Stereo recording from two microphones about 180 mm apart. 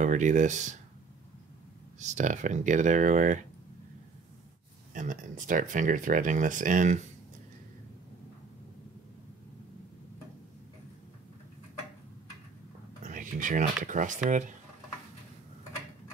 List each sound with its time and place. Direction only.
0.0 s speech: 45° right (ahead or behind)
2.0 s speech: 40° right (ahead or behind)
4.9 s speech: 45° right (ahead or behind)
13.0 s a sound: 45° right (ahead or behind)
13.8 s speech: 45° right (ahead or behind)